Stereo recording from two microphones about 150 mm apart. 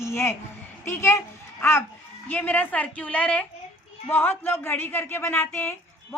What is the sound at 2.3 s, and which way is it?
A woman's voice, 10° left (ahead or behind).